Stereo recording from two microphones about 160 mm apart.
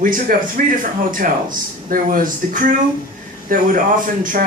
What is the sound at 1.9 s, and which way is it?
Speech, 60° right (ahead or behind).